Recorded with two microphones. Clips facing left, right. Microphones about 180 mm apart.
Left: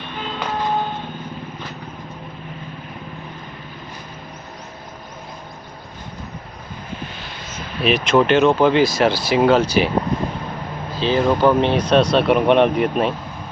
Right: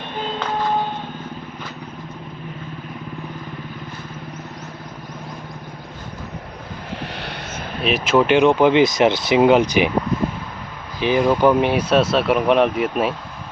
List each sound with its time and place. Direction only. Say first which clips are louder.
7.0 s vehicle: right 3 dB; 65° right (ahead or behind)
7.8 s speech: left 1 dB; centre (ahead or behind); by 9.9 s 15° right (ahead or behind)
11.0 s speech: even; 15° right (ahead or behind)